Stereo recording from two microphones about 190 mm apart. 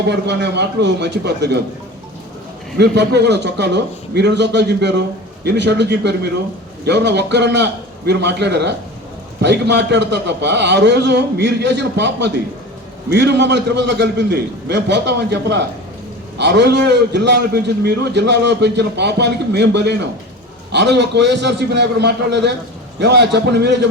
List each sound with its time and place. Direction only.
0.0 s a man's voice: 60° right (ahead or behind)
2.7 s a man's voice: 60° right (ahead or behind)